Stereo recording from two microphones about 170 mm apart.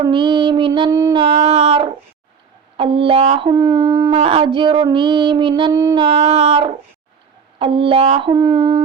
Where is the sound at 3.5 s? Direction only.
25° right (ahead or behind).